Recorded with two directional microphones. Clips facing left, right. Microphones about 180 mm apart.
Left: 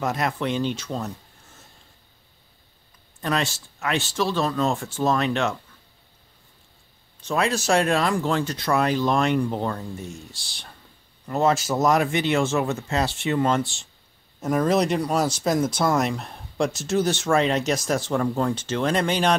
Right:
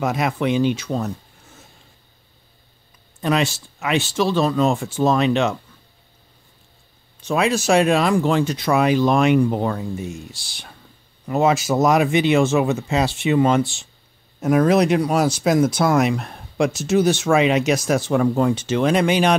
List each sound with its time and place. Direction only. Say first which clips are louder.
0.0 s speech: right 4 dB; 10° right (ahead or behind)
3.2 s speech: right 5 dB; 15° right (ahead or behind)
7.2 s speech: right 4 dB; 10° right (ahead or behind)